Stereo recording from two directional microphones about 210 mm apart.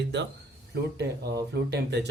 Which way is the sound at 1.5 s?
55° right (ahead or behind).